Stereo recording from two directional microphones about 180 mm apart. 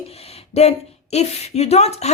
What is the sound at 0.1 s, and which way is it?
Speech, 35° left (ahead or behind).